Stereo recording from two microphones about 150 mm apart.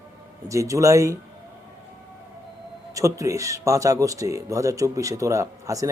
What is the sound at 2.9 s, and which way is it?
Speech, 20° right (ahead or behind).